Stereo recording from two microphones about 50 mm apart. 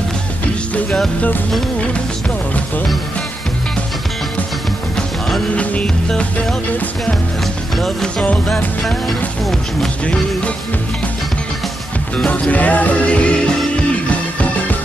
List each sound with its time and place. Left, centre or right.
7.7 s music: centre
12.3 s music: left